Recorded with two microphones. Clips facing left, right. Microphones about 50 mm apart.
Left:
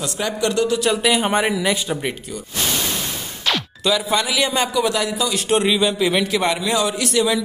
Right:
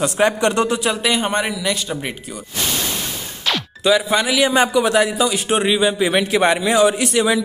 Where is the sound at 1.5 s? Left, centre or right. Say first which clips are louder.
Left 2 dB; centre.